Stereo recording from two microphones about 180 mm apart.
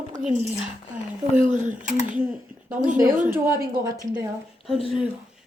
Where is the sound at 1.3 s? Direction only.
45° right (ahead or behind).